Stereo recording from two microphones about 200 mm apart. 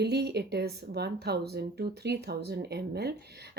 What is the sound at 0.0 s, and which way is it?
A woman's voice, 55° right (ahead or behind).